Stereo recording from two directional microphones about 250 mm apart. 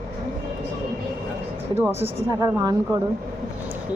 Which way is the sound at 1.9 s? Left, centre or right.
Centre.